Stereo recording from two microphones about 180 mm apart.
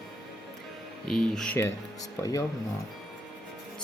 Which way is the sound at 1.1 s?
5° left (ahead or behind).